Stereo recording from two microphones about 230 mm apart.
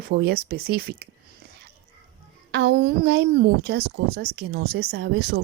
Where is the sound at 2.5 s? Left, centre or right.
Right.